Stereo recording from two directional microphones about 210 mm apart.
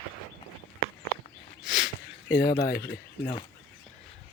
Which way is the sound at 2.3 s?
50° left (ahead or behind).